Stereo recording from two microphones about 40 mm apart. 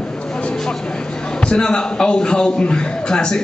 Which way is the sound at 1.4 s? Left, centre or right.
Centre.